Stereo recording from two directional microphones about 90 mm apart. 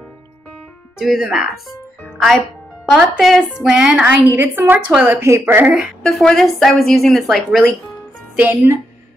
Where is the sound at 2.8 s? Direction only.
Centre (ahead or behind).